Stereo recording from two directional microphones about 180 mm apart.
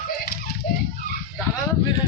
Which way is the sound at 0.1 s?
55° left (ahead or behind).